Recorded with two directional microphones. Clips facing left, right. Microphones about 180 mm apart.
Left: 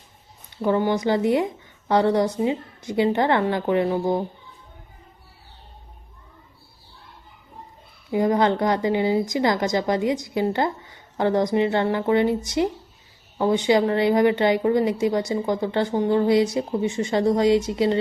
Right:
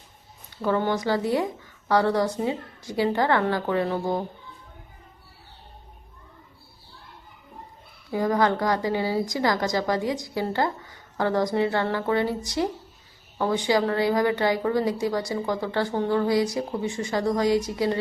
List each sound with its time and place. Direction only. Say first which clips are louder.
0.6 s a woman's voice: left 3 dB; 15° left (ahead or behind)
8.1 s a woman's voice: left 3 dB; 20° left (ahead or behind)